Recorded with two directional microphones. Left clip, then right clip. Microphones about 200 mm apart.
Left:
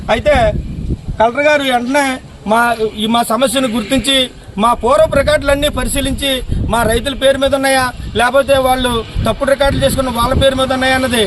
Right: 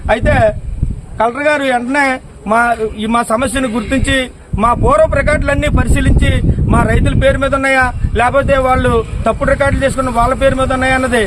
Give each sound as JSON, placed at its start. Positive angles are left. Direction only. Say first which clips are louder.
{"t": 0.1, "sound": "a man's voice", "louder": "even", "side_deg": 50}
{"t": 2.5, "sound": "a man's voice", "louder": "even", "side_deg": 15}